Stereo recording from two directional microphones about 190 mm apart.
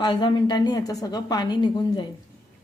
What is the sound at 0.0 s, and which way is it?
A woman's voice, 25° left (ahead or behind).